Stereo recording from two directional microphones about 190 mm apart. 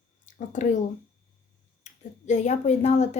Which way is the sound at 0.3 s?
40° left (ahead or behind).